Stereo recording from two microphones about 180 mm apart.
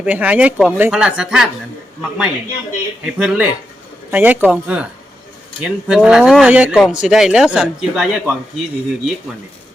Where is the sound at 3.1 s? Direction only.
5° right (ahead or behind).